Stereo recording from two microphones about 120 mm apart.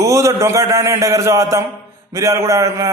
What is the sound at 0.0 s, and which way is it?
A man's voice, 25° right (ahead or behind).